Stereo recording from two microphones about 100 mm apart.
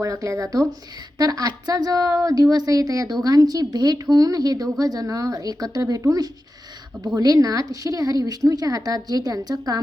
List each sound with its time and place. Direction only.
0.0 s speech: 30° right (ahead or behind)